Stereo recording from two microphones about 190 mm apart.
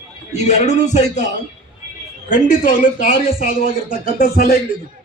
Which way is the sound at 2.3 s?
45° left (ahead or behind).